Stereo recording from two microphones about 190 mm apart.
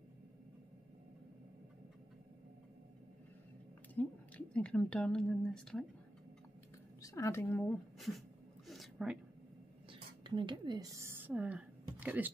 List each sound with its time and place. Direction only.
3.9 s a woman's voice: 10° left (ahead or behind)
7.0 s a woman's voice: 15° left (ahead or behind)
7.5 s a woman's voice: 5° left (ahead or behind)
8.6 s a sound: centre (ahead or behind)
9.8 s speech: 25° right (ahead or behind); by 12.3 s 10° right (ahead or behind)